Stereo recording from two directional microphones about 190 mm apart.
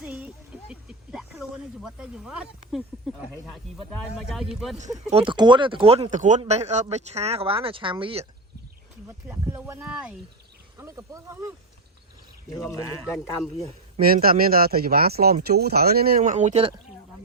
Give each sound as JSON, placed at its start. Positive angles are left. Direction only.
{"t": 0.0, "sound": "a sound", "side_deg": -5}
{"t": 3.9, "sound": "speech", "side_deg": 0}
{"t": 4.9, "sound": "a man's voice", "side_deg": -30}
{"t": 9.0, "sound": "a sound", "side_deg": -10}
{"t": 10.8, "sound": "speech", "side_deg": -15}
{"t": 14.0, "sound": "speech", "side_deg": -50}